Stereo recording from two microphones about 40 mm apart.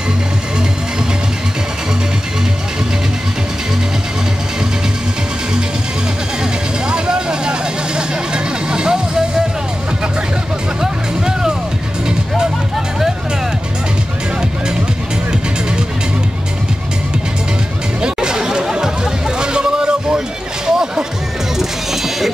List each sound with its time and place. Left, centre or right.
6.9 s vehicle: right
8.6 s music: right
10.8 s music: centre
18.0 s chatter: centre
19.3 s a sound: right
20.6 s music: centre